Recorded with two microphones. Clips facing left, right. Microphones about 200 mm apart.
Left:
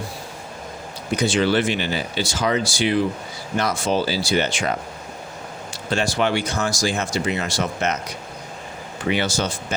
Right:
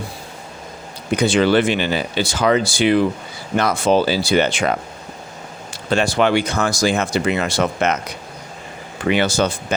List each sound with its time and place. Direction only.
1.1 s speech: 60° right (ahead or behind)
5.9 s speech: 60° right (ahead or behind)
9.0 s speech: 60° right (ahead or behind)